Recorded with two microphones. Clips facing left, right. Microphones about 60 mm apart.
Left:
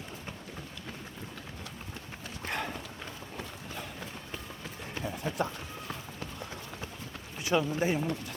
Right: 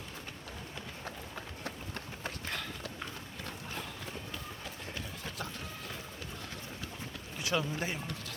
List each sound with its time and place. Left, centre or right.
2.5 s clip-clop: left
4.9 s run: left
7.3 s speech: centre